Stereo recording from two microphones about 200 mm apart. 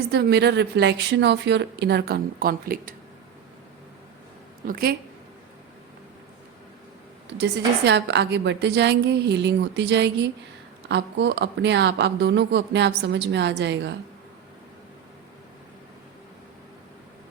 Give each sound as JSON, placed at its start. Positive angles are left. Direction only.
{"t": 0.1, "sound": "speech", "side_deg": -55}
{"t": 4.6, "sound": "a woman's voice", "side_deg": -45}
{"t": 7.3, "sound": "speech", "side_deg": -55}